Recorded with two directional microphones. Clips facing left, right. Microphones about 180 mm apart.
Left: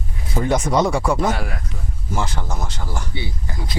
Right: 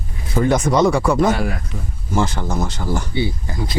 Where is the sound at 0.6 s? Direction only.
10° left (ahead or behind).